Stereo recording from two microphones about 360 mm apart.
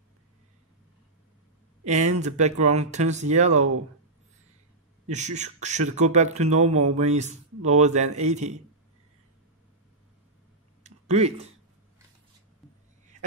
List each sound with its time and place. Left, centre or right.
1.9 s speech: centre
5.0 s speech: centre
10.8 s a sound: centre